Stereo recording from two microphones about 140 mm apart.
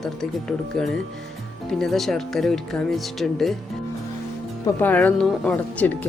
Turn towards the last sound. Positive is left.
turn(degrees=10)  # may be behind; listen again after turning